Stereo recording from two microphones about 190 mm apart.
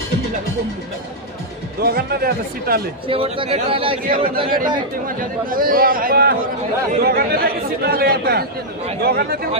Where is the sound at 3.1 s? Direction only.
30° right (ahead or behind).